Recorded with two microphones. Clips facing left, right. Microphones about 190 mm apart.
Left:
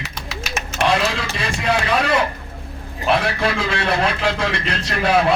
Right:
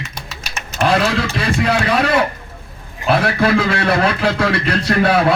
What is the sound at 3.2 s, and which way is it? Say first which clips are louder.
A man's voice: right 6 dB; 55° right (ahead or behind).